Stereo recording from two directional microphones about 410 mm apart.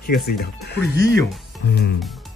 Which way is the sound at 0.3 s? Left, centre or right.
Left.